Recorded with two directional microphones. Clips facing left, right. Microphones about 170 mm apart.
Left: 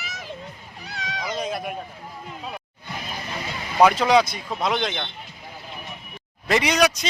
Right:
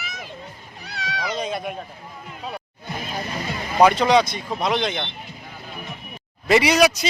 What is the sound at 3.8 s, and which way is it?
Speech, 5° left (ahead or behind).